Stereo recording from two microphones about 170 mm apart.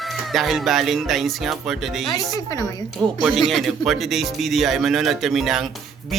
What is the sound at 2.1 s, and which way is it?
Speech, 20° left (ahead or behind).